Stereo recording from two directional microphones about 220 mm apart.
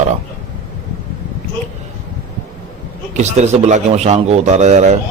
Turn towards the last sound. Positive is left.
turn(degrees=-30)  # may be behind; listen again after turning